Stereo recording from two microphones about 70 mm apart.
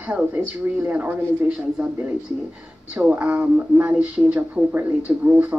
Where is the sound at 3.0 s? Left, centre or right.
Right.